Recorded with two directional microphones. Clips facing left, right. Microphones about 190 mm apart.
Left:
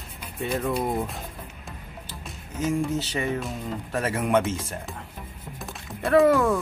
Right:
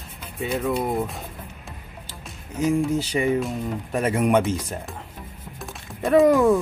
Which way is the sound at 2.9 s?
15° right (ahead or behind).